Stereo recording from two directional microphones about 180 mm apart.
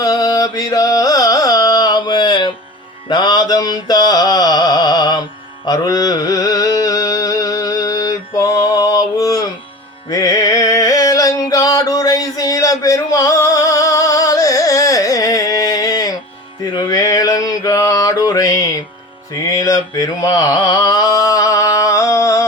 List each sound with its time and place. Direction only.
0.0 s carnatic music: 20° left (ahead or behind)
3.1 s mantra: 25° left (ahead or behind)
5.6 s music: 20° left (ahead or behind)
16.7 s mantra: 20° left (ahead or behind)
19.5 s a sound: 20° left (ahead or behind)